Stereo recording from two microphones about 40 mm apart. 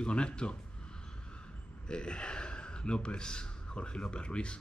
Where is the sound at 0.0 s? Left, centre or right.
Left.